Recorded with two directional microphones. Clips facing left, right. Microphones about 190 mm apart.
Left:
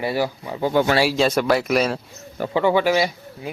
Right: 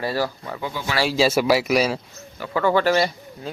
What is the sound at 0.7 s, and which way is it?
Speech, 60° left (ahead or behind).